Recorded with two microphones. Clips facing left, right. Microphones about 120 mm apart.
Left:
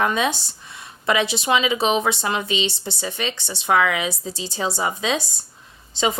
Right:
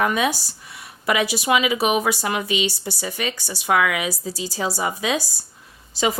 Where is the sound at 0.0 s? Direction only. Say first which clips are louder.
Even; 25° left (ahead or behind).